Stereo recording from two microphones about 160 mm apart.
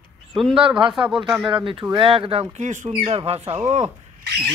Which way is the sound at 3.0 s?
40° right (ahead or behind).